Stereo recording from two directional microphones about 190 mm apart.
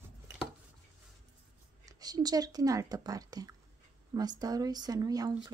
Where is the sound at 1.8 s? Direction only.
20° right (ahead or behind).